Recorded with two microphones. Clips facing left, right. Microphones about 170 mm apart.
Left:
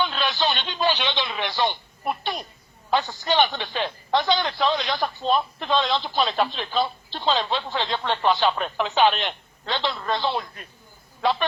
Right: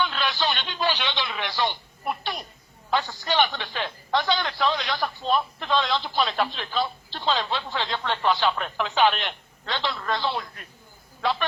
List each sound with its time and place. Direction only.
0.0 s radio: 20° left (ahead or behind)
2.9 s a man's voice: 20° left (ahead or behind)